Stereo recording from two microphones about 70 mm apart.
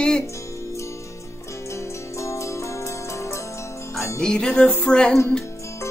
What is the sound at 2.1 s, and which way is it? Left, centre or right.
Zither, left.